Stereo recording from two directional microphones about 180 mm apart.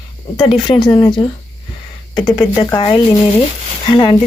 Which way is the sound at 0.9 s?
15° left (ahead or behind).